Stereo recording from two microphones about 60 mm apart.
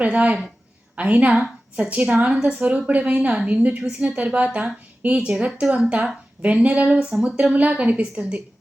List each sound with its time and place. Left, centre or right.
0.0 s a woman's voice: right